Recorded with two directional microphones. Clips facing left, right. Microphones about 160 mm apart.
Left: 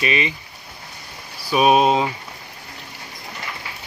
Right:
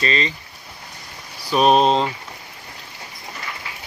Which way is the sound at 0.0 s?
15° left (ahead or behind).